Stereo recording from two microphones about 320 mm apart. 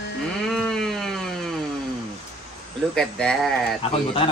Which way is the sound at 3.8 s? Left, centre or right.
Centre.